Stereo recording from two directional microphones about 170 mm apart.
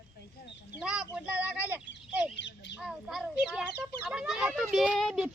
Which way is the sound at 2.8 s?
Centre (ahead or behind).